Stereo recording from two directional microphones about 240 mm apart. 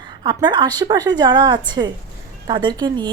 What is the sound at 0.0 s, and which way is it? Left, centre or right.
A woman's voice, centre.